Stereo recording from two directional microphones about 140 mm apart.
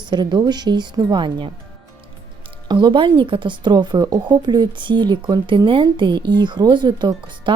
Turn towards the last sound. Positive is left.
turn(degrees=-35)  # may be behind; listen again after turning